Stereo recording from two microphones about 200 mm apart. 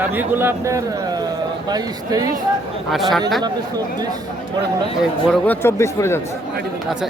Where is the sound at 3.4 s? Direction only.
20° right (ahead or behind).